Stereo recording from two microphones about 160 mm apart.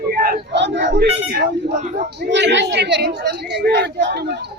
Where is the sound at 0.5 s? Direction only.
90° right.